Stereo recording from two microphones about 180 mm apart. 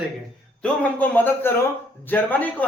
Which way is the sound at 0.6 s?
10° left (ahead or behind).